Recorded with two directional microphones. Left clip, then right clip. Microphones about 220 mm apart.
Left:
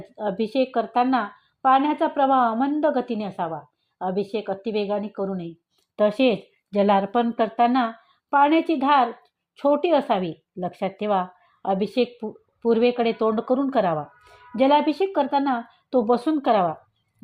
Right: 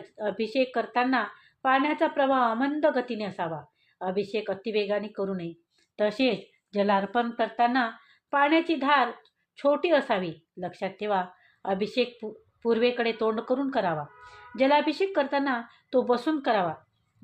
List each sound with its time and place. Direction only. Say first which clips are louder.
0.2 s speech: left 3 dB; 20° left (ahead or behind)